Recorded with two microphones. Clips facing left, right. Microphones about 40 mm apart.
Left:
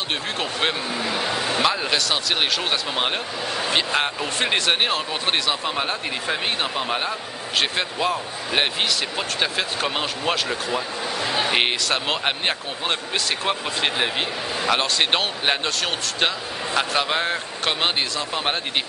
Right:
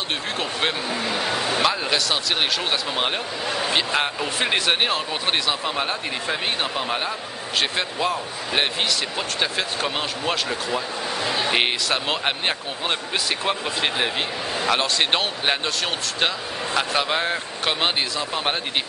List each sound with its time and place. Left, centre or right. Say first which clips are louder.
0.4 s speech: left 1 dB; centre